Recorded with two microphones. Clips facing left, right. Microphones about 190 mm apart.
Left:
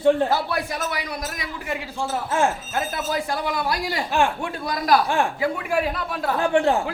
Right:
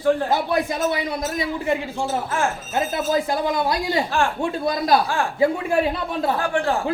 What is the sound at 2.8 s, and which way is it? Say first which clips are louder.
Speech: right 6 dB; 25° right (ahead or behind).